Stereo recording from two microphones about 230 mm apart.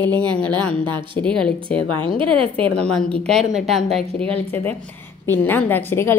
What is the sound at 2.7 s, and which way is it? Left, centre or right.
A woman's voice, centre.